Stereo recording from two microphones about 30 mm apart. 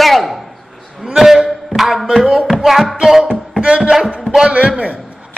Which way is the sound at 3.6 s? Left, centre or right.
Right.